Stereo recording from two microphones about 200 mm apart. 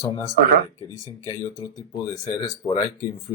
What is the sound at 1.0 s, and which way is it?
Speech, 15° left (ahead or behind).